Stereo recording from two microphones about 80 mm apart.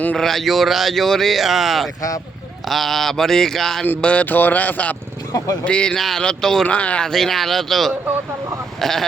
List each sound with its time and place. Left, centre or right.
0.2 s a man's voice: centre
2.0 s speech: left
2.6 s a man's voice: centre
4.0 s speech: centre
7.1 s a man's voice: centre